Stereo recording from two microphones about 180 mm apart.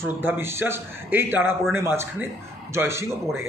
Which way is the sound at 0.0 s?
10° right (ahead or behind).